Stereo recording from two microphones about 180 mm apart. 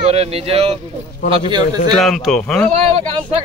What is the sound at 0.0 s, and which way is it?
Speech, 35° right (ahead or behind).